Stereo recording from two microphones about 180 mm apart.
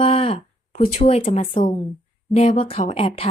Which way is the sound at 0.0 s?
30° left (ahead or behind).